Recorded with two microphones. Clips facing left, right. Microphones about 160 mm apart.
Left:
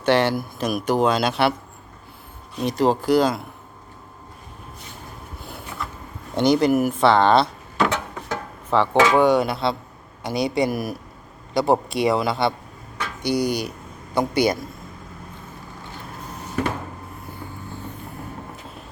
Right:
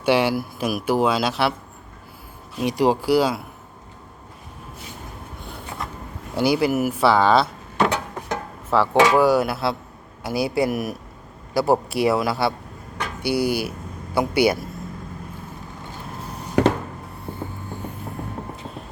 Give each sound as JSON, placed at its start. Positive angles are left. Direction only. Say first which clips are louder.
{"t": 0.0, "sound": "speech", "louder": "even", "side_deg": -10}
{"t": 2.6, "sound": "speech", "louder": "even", "side_deg": -10}
{"t": 6.3, "sound": "speech", "louder": "left 2 dB", "side_deg": -5}
{"t": 8.7, "sound": "speech", "louder": "even", "side_deg": -5}
{"t": 17.3, "sound": "a sound", "louder": "right 8 dB", "side_deg": -60}